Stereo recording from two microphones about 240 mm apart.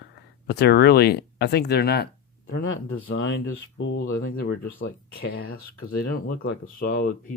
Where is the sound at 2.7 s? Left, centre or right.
Left.